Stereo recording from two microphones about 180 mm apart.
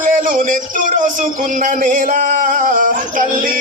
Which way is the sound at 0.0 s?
50° right (ahead or behind).